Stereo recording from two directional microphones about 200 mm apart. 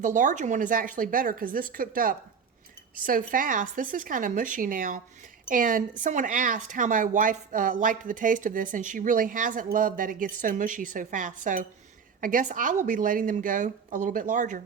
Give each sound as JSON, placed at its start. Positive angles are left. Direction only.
{"t": 0.0, "sound": "speech", "side_deg": -40}